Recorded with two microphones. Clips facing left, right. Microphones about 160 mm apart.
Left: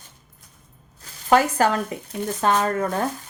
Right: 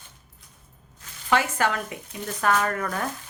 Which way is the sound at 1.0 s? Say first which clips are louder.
Left 6 dB; 40° left (ahead or behind).